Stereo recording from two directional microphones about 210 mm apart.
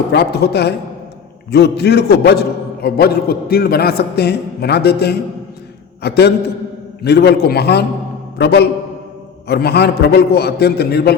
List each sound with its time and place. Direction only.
0.1 s a man's voice: 50° left (ahead or behind)